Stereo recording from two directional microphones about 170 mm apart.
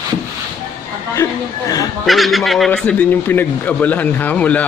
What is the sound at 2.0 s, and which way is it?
Speech, centre (ahead or behind).